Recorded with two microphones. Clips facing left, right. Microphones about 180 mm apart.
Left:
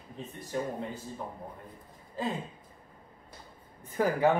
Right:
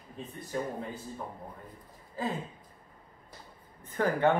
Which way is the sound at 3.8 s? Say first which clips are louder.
Left 1 dB; 5° left (ahead or behind).